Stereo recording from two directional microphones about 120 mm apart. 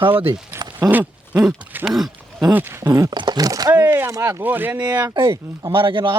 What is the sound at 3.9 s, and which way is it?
Speech, 20° right (ahead or behind).